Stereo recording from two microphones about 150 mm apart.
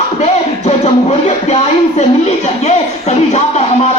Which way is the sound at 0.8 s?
45° left (ahead or behind).